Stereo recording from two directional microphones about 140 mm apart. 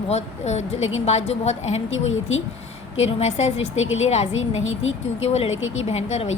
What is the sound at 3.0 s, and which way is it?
A woman's voice, 50° left (ahead or behind).